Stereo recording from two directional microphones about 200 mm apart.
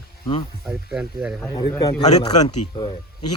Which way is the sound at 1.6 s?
20° left (ahead or behind).